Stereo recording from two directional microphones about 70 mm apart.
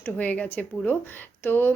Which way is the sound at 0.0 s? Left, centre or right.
Left.